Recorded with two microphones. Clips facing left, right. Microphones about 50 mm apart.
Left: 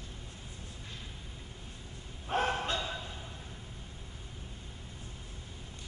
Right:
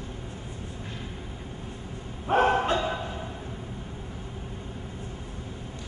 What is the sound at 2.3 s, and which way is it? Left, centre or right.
Bow-wow, right.